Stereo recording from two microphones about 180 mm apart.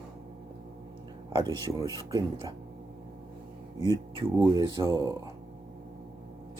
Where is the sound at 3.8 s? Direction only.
30° right (ahead or behind).